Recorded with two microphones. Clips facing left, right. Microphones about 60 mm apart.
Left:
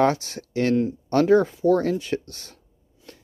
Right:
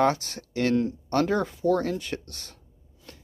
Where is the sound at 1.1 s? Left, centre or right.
Left.